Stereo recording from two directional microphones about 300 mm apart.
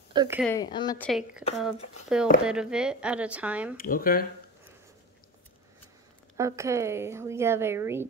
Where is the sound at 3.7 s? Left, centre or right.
Left.